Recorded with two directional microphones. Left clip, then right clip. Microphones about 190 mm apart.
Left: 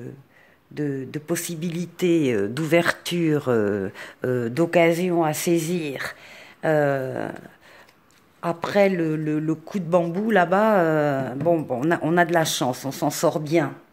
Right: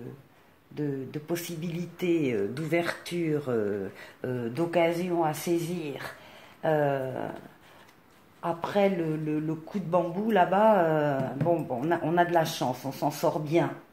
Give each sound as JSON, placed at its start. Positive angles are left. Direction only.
{"t": 0.7, "sound": "speech", "side_deg": 55}
{"t": 8.4, "sound": "speech", "side_deg": 55}